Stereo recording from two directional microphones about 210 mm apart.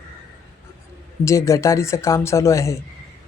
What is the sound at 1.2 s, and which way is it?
Speech, 15° left (ahead or behind).